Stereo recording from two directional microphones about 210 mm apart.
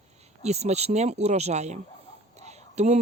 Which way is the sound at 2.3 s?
30° right (ahead or behind).